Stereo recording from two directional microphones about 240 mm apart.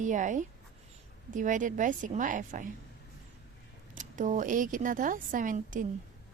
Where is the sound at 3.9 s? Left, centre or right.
Right.